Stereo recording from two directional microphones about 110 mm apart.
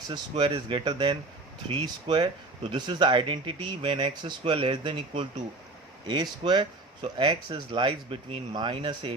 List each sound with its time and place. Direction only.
0.1 s speech: 50° right (ahead or behind)